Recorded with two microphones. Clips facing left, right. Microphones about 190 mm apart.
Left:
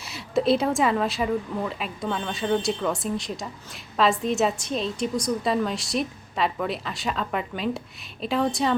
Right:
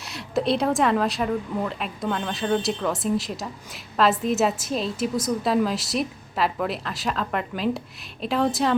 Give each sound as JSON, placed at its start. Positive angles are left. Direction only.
{"t": 0.0, "sound": "a woman's voice", "side_deg": 0}